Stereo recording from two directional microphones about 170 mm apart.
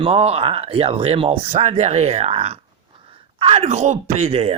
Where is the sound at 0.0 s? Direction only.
35° right (ahead or behind).